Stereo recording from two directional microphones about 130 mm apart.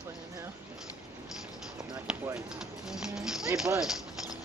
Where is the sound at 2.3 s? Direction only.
5° right (ahead or behind).